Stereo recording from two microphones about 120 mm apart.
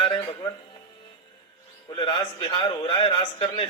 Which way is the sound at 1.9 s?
40° left (ahead or behind).